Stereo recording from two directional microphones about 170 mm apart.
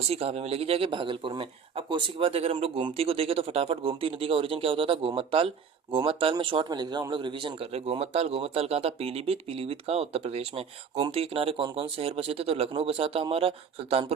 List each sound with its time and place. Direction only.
0.0 s a man's voice: 35° right (ahead or behind)